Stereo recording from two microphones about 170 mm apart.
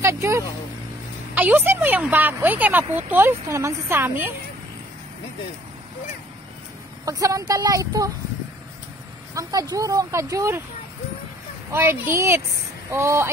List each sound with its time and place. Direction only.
0.0 s a woman's voice: 15° right (ahead or behind)
7.1 s speech: 20° right (ahead or behind)
9.3 s speech: 20° right (ahead or behind)
11.7 s a woman's voice: 15° right (ahead or behind)